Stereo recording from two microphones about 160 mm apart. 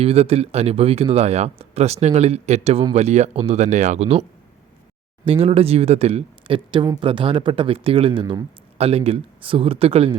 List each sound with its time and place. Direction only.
0.0 s speech: 40° right (ahead or behind)
5.2 s speech: 35° right (ahead or behind)